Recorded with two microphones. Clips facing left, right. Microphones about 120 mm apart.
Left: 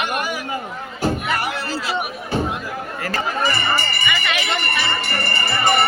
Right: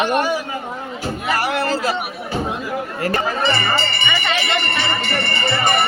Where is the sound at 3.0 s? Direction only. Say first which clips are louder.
Right 2 dB; 25° right (ahead or behind).